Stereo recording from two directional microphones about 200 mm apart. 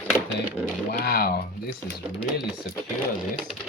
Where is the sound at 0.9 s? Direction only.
50° left (ahead or behind).